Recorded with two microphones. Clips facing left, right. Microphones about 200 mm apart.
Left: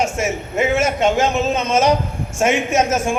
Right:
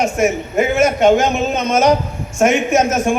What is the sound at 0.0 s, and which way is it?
A man's voice, 25° left (ahead or behind).